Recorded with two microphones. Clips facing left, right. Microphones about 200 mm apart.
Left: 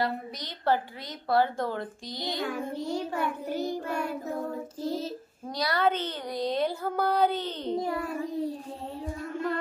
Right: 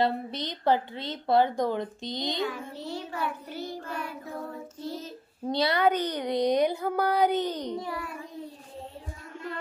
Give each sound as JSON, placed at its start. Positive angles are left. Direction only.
{"t": 0.0, "sound": "a woman's voice", "side_deg": -25}
{"t": 2.4, "sound": "child singing", "side_deg": 45}
{"t": 5.5, "sound": "a woman's voice", "side_deg": -25}
{"t": 7.8, "sound": "a child's voice", "side_deg": 40}